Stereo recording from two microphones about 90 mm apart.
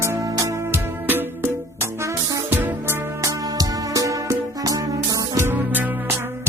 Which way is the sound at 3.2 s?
40° right (ahead or behind).